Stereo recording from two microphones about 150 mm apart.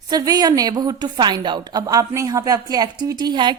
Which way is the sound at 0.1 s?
25° right (ahead or behind).